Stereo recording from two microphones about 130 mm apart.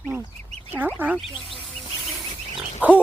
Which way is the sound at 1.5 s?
Centre (ahead or behind).